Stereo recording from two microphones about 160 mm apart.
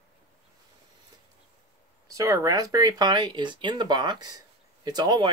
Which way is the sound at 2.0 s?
20° right (ahead or behind).